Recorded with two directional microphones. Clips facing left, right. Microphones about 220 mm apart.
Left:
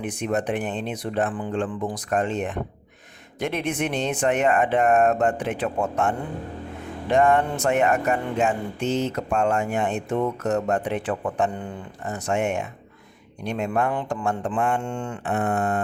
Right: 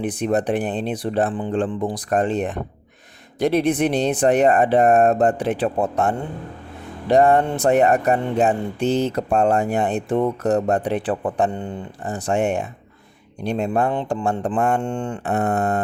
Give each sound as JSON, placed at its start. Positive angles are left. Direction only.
{"t": 0.0, "sound": "speech", "side_deg": -35}